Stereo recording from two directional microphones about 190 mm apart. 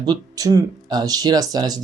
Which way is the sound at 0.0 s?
20° right (ahead or behind).